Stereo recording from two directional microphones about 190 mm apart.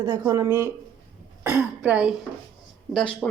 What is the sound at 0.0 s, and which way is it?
Speech, 15° right (ahead or behind).